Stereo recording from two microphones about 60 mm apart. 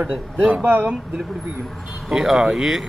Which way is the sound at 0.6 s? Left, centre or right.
Right.